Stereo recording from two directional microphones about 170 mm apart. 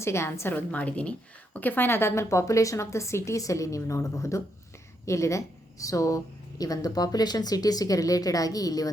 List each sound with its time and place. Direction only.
0.0 s a woman's voice: 15° left (ahead or behind)